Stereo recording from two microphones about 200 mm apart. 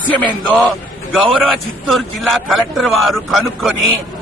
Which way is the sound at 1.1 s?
Centre (ahead or behind).